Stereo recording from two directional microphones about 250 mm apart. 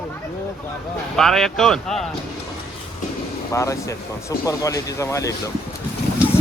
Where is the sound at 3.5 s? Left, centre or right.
Centre.